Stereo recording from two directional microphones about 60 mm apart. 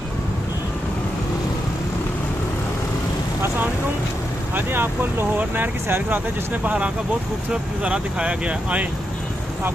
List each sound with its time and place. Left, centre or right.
4.5 s speech: right